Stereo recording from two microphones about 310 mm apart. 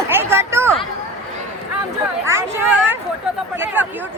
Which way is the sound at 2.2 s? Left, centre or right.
Centre.